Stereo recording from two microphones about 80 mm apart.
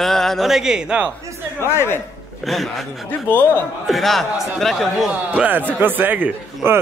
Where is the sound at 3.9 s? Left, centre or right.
Centre.